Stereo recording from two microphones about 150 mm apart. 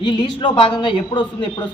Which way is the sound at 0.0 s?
30° left (ahead or behind).